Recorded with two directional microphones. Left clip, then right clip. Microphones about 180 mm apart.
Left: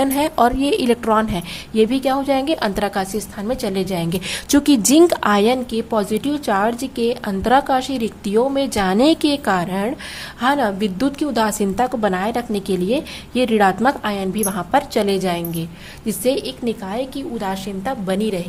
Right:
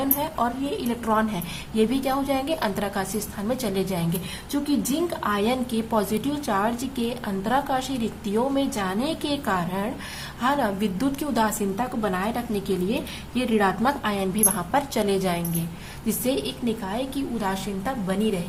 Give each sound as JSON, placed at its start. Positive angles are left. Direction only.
{"t": 0.0, "sound": "a woman's voice", "side_deg": 45}
{"t": 4.5, "sound": "speech", "side_deg": 55}
{"t": 5.7, "sound": "a woman's voice", "side_deg": 30}